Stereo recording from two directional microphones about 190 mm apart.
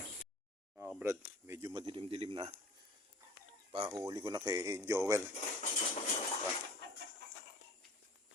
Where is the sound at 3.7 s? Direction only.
25° right (ahead or behind).